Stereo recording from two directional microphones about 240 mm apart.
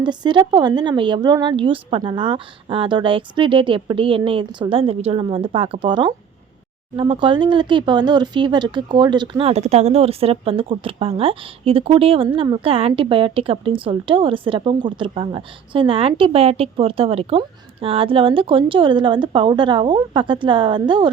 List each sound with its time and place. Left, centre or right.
0.0 s speech: centre